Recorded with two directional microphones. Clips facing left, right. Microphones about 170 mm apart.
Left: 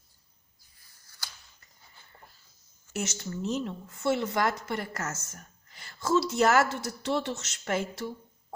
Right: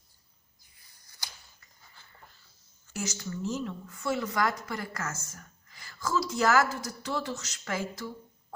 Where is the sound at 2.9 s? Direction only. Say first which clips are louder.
Left 2 dB; 25° left (ahead or behind).